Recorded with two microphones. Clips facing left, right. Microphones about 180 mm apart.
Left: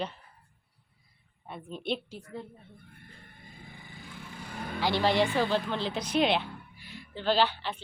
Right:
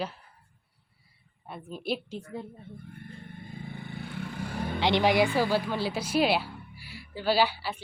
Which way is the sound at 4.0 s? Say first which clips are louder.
Right 8 dB; 65° right (ahead or behind).